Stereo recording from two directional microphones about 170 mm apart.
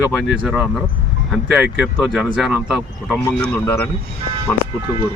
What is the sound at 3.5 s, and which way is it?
Speech, 15° left (ahead or behind).